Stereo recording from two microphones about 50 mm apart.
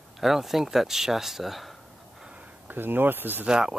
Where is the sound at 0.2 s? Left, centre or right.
Centre.